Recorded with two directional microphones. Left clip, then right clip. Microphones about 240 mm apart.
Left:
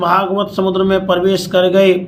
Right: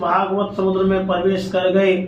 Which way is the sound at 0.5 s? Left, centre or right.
Left.